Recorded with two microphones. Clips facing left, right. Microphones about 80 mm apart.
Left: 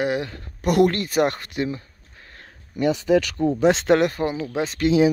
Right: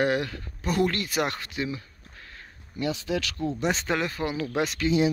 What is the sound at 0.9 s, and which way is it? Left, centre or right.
Speech, left.